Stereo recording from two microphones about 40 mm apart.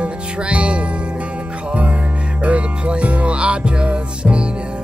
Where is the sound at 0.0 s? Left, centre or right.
Right.